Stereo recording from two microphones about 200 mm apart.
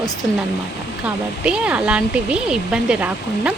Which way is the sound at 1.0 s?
5° right (ahead or behind).